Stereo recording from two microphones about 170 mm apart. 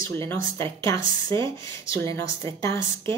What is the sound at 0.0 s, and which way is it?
Speech, 15° left (ahead or behind).